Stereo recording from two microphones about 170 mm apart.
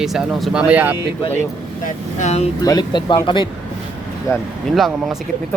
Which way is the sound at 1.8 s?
45° left (ahead or behind).